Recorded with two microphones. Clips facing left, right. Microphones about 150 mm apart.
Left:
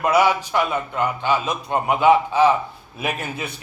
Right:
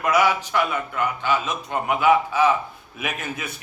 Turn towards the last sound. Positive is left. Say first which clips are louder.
# left 3 dB
turn(degrees=35)  # may be behind; listen again after turning